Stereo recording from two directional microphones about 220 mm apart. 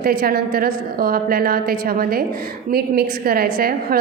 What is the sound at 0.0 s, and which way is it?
A woman's voice, 40° right (ahead or behind).